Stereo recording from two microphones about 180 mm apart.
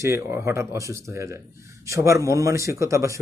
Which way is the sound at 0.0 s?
15° right (ahead or behind).